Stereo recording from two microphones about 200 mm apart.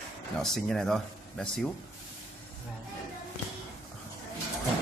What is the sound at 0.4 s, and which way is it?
Speech, centre (ahead or behind).